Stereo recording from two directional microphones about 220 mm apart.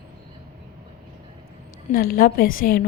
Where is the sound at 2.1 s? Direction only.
40° left (ahead or behind).